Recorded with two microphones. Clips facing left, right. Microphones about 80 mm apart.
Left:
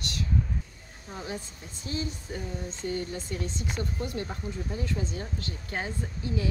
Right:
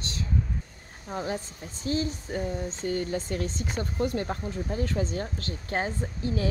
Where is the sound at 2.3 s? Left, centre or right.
Right.